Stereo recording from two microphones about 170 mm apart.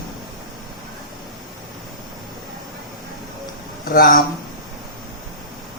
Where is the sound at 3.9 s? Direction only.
60° left (ahead or behind).